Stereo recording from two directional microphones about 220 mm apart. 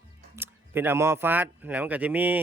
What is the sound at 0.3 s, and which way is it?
Speech, 10° right (ahead or behind).